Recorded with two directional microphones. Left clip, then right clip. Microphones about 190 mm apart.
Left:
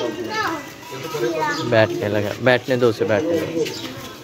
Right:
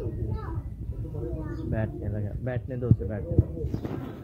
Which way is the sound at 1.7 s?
35° left (ahead or behind).